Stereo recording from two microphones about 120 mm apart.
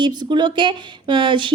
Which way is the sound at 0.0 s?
40° right (ahead or behind).